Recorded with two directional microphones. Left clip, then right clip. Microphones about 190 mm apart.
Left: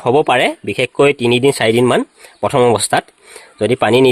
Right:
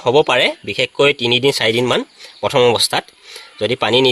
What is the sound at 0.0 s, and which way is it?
Speech, 60° left (ahead or behind).